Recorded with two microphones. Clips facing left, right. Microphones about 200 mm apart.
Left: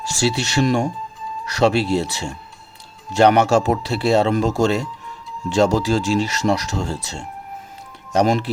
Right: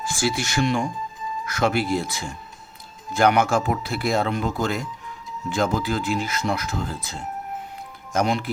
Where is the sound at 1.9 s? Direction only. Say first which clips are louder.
Left 4 dB; 70° left (ahead or behind).